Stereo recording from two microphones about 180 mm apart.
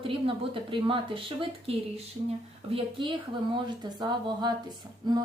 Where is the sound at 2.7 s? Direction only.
25° right (ahead or behind).